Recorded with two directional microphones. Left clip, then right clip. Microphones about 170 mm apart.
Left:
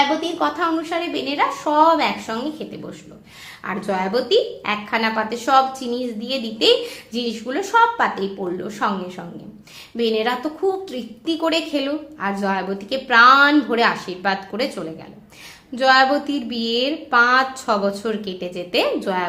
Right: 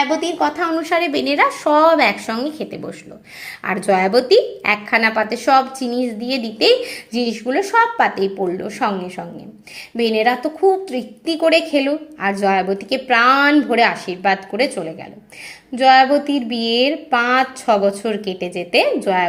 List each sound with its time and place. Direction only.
0.3 s a woman's voice: 20° right (ahead or behind)
0.8 s a woman's voice: 60° right (ahead or behind); by 18.9 s 25° right (ahead or behind)